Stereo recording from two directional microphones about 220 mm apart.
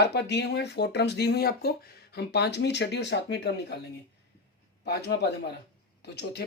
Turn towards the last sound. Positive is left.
turn(degrees=50)  # may be behind; listen again after turning